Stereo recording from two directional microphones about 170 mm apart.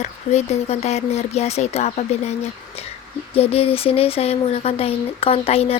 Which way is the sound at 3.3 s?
35° left (ahead or behind).